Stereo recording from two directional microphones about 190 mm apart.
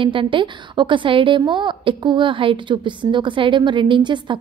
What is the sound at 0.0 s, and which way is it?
A woman's voice, 25° right (ahead or behind).